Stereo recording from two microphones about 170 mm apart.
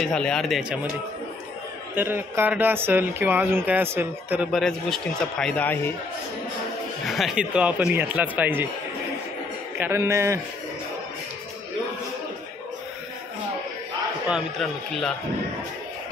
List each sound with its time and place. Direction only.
0.0 s a man's voice: 5° left (ahead or behind)
2.0 s speech: 15° right (ahead or behind); by 5.9 s 10° left (ahead or behind)
7.1 s speech: centre (ahead or behind)
9.8 s speech: 15° right (ahead or behind)
14.2 s a man's voice: centre (ahead or behind)